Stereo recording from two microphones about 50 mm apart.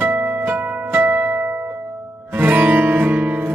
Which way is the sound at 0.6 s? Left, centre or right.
Right.